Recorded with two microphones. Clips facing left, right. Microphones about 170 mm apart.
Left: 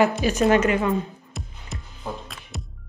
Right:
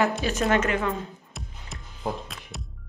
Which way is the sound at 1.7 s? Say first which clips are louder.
Right 2 dB; centre (ahead or behind).